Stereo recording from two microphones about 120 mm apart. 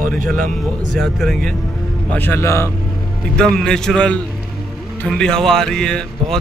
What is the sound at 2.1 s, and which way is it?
Speech, 15° left (ahead or behind).